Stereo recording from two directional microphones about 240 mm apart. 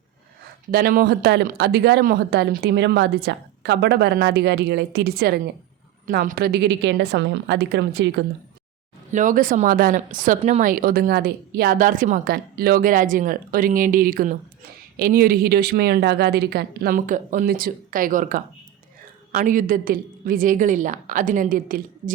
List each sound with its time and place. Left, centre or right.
0.7 s speech: right
9.1 s speech: right